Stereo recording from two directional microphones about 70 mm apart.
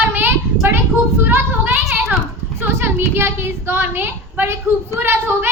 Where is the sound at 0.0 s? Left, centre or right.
Right.